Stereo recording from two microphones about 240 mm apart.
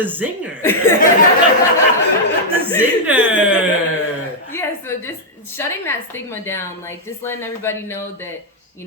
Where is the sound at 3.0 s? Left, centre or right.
Centre.